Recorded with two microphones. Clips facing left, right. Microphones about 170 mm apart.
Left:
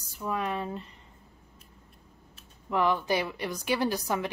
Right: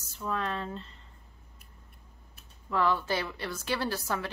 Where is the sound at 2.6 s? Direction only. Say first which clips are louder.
Left 2 dB; 15° left (ahead or behind).